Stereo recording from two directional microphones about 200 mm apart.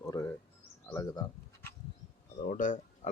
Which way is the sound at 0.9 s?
20° left (ahead or behind).